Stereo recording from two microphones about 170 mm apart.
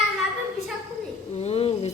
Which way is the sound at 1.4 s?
35° left (ahead or behind).